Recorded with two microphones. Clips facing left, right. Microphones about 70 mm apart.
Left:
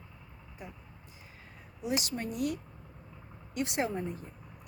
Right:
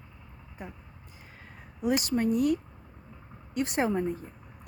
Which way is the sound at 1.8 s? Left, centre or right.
Right.